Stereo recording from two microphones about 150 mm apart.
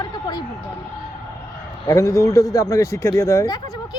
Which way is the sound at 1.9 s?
20° left (ahead or behind).